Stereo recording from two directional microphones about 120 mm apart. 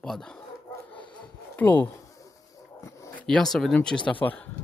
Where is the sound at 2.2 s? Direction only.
25° left (ahead or behind).